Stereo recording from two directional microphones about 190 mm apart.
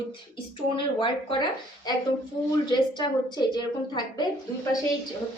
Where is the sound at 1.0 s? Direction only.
25° left (ahead or behind).